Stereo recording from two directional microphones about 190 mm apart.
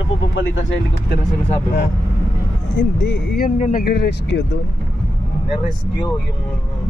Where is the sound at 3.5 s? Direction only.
40° left (ahead or behind); by 4.4 s 60° left (ahead or behind).